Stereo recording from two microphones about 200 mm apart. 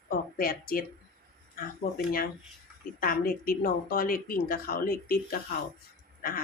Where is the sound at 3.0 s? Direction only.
45° left (ahead or behind).